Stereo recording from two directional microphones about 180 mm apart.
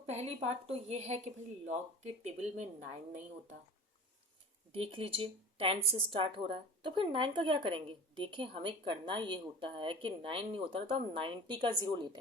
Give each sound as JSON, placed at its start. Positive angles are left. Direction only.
{"t": 0.0, "sound": "a woman's voice", "side_deg": -35}
{"t": 4.7, "sound": "speech", "side_deg": -30}